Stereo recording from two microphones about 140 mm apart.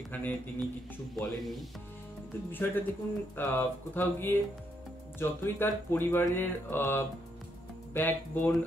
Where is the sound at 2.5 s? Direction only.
15° left (ahead or behind).